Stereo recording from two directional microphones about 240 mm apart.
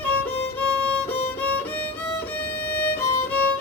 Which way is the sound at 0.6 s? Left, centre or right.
Centre.